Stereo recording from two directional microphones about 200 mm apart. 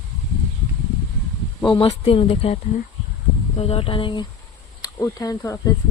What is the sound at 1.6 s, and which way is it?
Speech, 25° left (ahead or behind).